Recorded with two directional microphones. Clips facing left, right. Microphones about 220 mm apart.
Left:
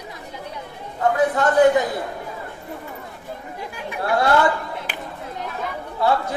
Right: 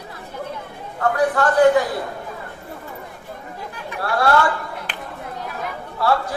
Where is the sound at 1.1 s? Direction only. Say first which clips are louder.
Even; 20° left (ahead or behind).